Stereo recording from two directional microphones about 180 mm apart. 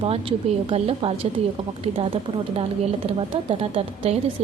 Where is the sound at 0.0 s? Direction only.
30° right (ahead or behind).